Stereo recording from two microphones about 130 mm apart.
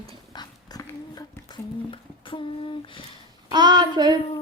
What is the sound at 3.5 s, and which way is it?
Child singing, 35° right (ahead or behind).